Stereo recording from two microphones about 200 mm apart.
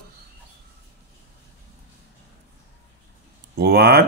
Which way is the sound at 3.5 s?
55° right (ahead or behind).